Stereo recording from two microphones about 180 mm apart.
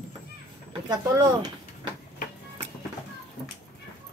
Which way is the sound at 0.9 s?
20° right (ahead or behind).